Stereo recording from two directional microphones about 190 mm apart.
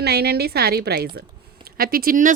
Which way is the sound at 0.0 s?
60° right (ahead or behind).